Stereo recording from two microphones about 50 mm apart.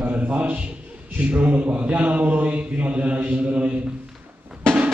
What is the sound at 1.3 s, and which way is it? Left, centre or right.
A man's voice, right.